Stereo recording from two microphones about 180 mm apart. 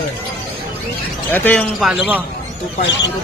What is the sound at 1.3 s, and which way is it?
Speech, 10° left (ahead or behind).